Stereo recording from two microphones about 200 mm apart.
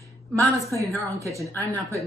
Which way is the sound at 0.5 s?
15° right (ahead or behind).